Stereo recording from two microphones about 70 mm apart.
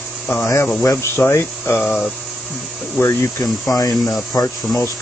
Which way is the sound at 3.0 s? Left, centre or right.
Left.